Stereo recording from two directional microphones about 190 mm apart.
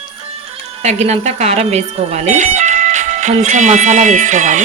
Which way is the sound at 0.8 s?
35° right (ahead or behind).